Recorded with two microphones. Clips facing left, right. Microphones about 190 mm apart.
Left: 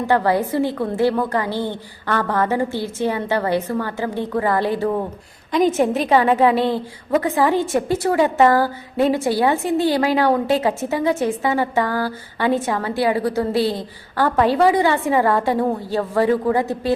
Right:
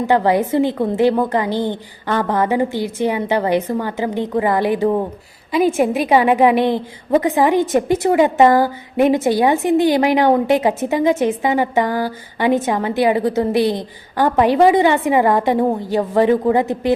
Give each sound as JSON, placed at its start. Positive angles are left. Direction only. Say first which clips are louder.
{"t": 0.1, "sound": "a woman's voice", "louder": "right 3 dB", "side_deg": -20}